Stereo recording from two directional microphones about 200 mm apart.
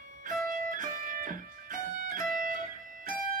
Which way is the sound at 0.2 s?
45° right (ahead or behind).